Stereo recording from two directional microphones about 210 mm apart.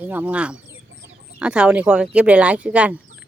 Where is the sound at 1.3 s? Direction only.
5° right (ahead or behind).